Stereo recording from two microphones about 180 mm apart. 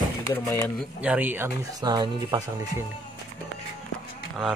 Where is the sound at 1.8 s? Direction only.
25° right (ahead or behind).